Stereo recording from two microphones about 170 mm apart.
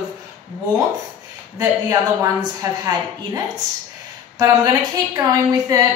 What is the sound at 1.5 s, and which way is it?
A woman's voice, 20° right (ahead or behind).